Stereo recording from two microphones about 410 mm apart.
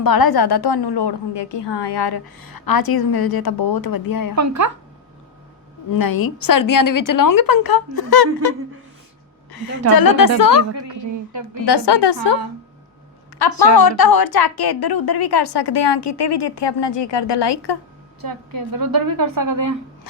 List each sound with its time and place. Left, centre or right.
0.0 s a woman's voice: left
4.4 s a woman's voice: right
5.9 s a woman's voice: left
9.9 s a woman's voice: left
10.6 s a woman's voice: right
11.6 s a woman's voice: left
13.4 s a woman's voice: left
18.2 s a woman's voice: right